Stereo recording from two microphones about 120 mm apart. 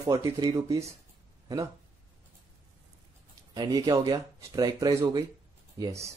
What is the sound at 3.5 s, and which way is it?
Speech, 35° right (ahead or behind).